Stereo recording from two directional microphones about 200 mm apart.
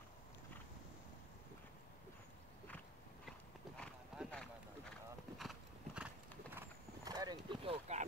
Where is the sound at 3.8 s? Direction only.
5° left (ahead or behind).